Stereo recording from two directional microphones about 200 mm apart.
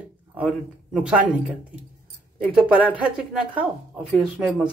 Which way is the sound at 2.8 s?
5° right (ahead or behind).